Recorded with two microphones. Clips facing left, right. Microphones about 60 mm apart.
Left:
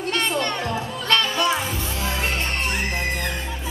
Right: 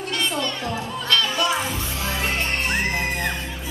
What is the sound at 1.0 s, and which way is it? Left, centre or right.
Music, left.